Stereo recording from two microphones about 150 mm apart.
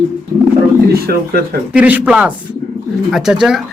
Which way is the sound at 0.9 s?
90° right.